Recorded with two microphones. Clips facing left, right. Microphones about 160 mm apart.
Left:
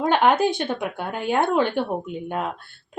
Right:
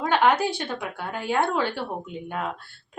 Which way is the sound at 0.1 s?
20° left (ahead or behind).